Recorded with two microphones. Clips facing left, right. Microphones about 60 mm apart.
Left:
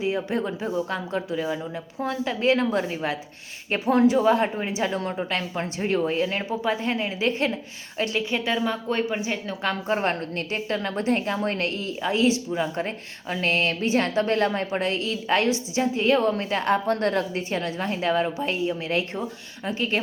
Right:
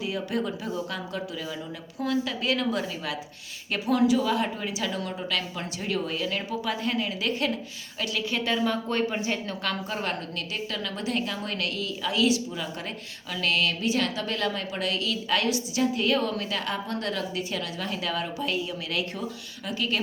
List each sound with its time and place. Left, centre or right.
0.0 s a woman's voice: left
8.4 s speech: centre
9.6 s a woman's voice: left